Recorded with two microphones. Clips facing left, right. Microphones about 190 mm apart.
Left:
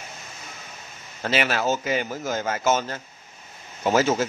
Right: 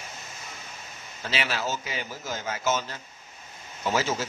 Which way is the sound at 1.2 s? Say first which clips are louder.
Left 6 dB; 55° left (ahead or behind).